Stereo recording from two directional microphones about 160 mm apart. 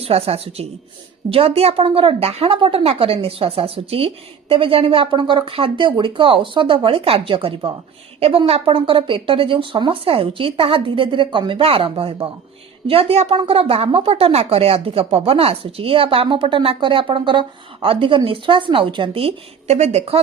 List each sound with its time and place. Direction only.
0.0 s a woman's voice: 40° right (ahead or behind)